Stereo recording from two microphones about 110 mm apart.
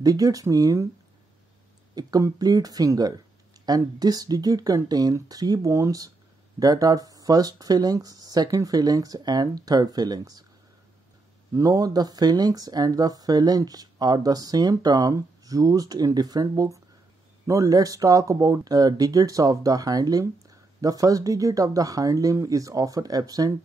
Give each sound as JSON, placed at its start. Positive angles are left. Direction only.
{"t": 0.0, "sound": "speech", "side_deg": -35}
{"t": 2.0, "sound": "speech", "side_deg": -35}
{"t": 11.5, "sound": "speech", "side_deg": -35}